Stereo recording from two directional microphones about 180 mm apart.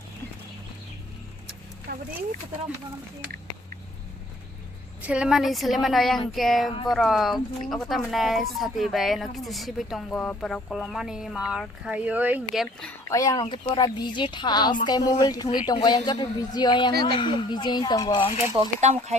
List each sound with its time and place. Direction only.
1.9 s a sound: 55° right (ahead or behind)
5.0 s speech: 5° right (ahead or behind)
6.7 s a woman's voice: 20° left (ahead or behind)
6.9 s speech: centre (ahead or behind)
13.1 s a woman's voice: 20° left (ahead or behind)
18.8 s speech: 40° right (ahead or behind)